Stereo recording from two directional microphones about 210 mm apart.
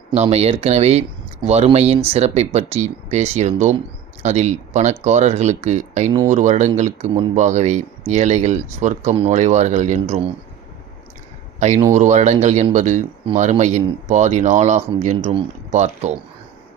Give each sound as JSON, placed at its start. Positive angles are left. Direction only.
{"t": 0.1, "sound": "speech", "side_deg": -30}
{"t": 11.9, "sound": "speech", "side_deg": -35}